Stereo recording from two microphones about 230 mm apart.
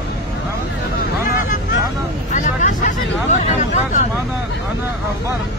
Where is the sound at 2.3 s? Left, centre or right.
Left.